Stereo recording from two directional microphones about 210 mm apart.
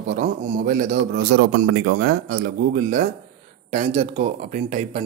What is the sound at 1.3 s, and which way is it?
Speech, 60° right (ahead or behind).